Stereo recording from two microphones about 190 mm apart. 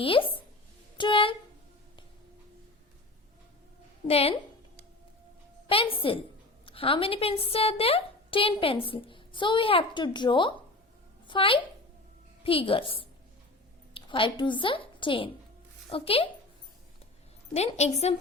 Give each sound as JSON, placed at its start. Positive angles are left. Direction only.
{"t": 0.0, "sound": "a woman's voice", "side_deg": 30}
{"t": 4.0, "sound": "a woman's voice", "side_deg": 30}
{"t": 5.6, "sound": "a woman's voice", "side_deg": 30}
{"t": 17.5, "sound": "a woman's voice", "side_deg": 35}